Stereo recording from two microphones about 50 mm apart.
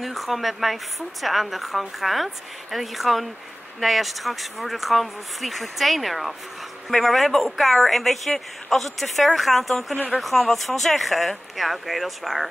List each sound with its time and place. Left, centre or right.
0.0 s a woman's voice: centre